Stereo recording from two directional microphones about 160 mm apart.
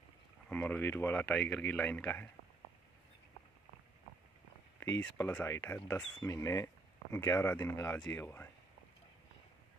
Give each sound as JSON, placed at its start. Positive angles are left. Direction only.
{"t": 0.5, "sound": "speech", "side_deg": 10}
{"t": 5.1, "sound": "speech", "side_deg": 15}
{"t": 6.1, "sound": "speech", "side_deg": 20}